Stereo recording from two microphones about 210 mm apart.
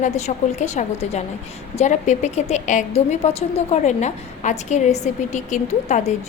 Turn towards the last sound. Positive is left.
turn(degrees=35)  # may be behind; listen again after turning